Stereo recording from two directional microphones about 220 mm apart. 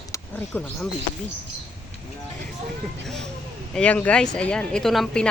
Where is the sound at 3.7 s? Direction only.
5° left (ahead or behind).